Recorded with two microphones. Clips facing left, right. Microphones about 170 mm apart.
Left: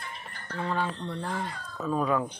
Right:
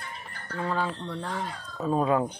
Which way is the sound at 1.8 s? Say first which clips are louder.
Right 3 dB; 30° right (ahead or behind).